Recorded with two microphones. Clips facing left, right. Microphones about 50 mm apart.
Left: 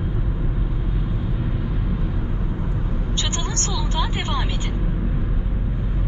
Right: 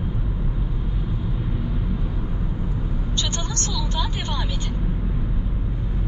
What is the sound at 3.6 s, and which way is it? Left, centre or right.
Vehicle, left.